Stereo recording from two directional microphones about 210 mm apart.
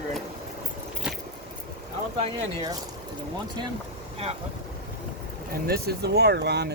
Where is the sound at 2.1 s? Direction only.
25° right (ahead or behind).